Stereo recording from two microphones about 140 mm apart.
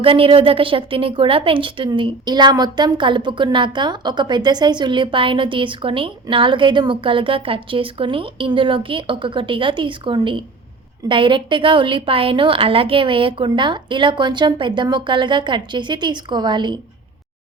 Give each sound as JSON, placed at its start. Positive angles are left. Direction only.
{"t": 0.0, "sound": "a woman's voice", "side_deg": -40}